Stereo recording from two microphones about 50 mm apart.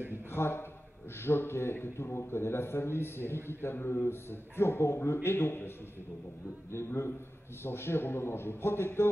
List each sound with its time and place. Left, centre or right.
0.3 s a man's voice: left
7.6 s a man's voice: left